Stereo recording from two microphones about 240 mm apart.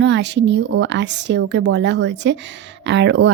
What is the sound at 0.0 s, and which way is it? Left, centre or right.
Speech, right.